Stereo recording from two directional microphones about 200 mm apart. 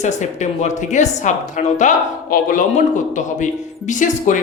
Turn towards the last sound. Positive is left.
turn(degrees=40)  # may be behind; listen again after turning